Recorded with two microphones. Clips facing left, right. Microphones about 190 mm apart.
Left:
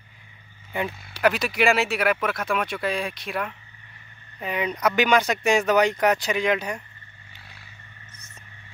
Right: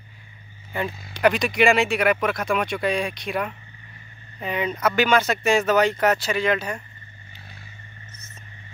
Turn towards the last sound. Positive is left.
turn(degrees=15)  # may be behind; listen again after turning